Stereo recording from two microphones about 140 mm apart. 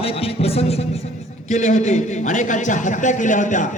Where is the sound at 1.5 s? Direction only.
60° left (ahead or behind).